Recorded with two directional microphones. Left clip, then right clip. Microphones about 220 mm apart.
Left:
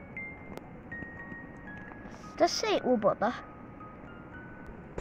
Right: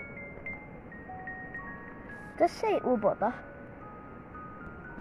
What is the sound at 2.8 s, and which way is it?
Speech, 35° left (ahead or behind).